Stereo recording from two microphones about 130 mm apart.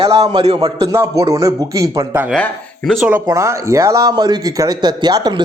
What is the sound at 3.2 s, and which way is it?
Speech, 20° right (ahead or behind).